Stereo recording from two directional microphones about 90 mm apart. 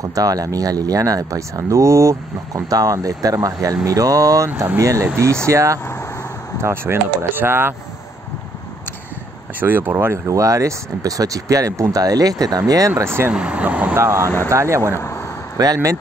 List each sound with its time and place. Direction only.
0.1 s speech: 40° right (ahead or behind); by 7.7 s 25° right (ahead or behind)
9.6 s speech: 20° right (ahead or behind)
13.3 s speech: 15° right (ahead or behind)
13.9 s speech: 30° right (ahead or behind)
15.0 s a sound: 30° left (ahead or behind)
15.5 s speech: 45° right (ahead or behind)